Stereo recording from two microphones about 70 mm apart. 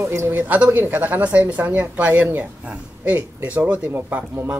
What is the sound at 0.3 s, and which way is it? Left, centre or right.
A man's voice, right.